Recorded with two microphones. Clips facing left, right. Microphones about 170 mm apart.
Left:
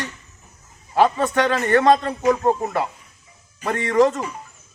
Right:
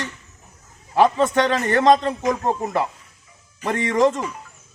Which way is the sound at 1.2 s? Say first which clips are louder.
Right 1 dB; 20° right (ahead or behind).